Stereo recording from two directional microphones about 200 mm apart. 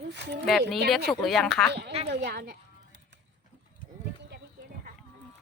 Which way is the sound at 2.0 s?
55° right (ahead or behind).